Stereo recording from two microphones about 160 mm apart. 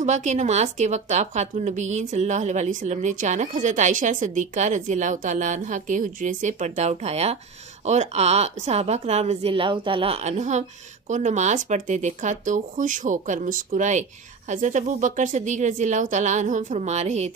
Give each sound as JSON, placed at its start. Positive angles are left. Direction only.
{"t": 0.0, "sound": "a woman's voice", "side_deg": -45}